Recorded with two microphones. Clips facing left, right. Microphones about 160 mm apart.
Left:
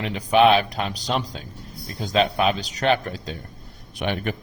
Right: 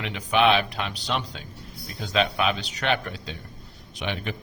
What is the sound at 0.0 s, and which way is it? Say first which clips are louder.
Speech: left 4 dB; 40° left (ahead or behind).